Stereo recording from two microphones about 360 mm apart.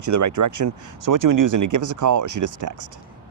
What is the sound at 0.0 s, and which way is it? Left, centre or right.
Speech, right.